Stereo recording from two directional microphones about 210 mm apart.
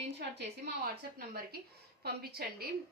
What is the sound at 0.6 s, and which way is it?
A woman's voice, 45° right (ahead or behind).